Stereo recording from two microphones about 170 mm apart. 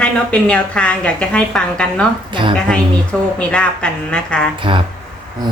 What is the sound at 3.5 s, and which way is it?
Speech, 5° left (ahead or behind).